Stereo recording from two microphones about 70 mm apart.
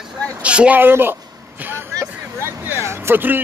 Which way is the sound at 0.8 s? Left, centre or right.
Right.